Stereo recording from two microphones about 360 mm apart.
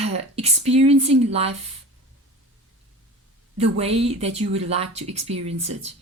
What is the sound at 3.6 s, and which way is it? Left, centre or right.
Speech, centre.